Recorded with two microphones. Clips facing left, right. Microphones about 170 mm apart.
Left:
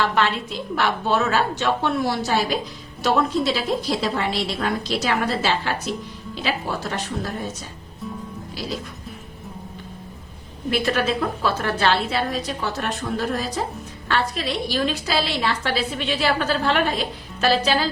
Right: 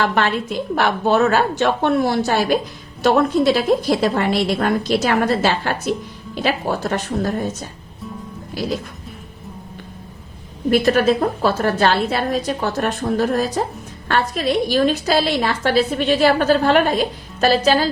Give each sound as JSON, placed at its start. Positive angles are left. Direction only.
{"t": 0.0, "sound": "a woman's voice", "side_deg": -50}
{"t": 10.7, "sound": "a woman's voice", "side_deg": -45}